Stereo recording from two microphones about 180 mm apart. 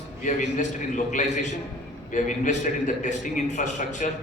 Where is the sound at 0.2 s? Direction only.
45° left (ahead or behind).